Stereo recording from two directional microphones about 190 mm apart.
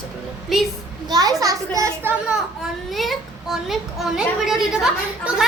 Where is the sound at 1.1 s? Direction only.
20° right (ahead or behind).